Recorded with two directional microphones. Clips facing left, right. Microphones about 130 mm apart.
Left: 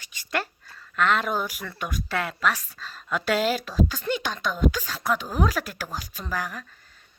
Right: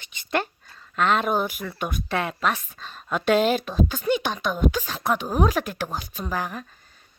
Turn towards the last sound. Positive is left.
turn(degrees=-20)  # may be behind; listen again after turning